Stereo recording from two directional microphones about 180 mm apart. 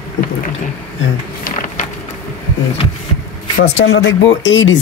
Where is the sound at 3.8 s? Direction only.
90° left.